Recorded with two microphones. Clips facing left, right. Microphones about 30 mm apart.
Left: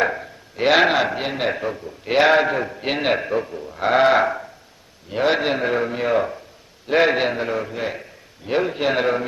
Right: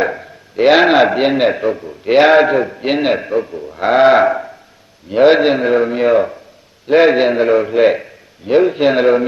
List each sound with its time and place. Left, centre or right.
0.0 s a sound: centre
0.9 s a man's voice: right; by 7.3 s centre
7.3 s a man's voice: right
7.8 s a man's voice: right
8.4 s a man's voice: centre